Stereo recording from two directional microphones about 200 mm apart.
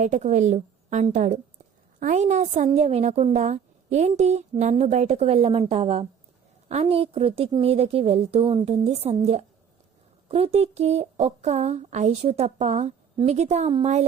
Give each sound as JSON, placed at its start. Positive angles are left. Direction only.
{"t": 0.0, "sound": "a woman's voice", "side_deg": -35}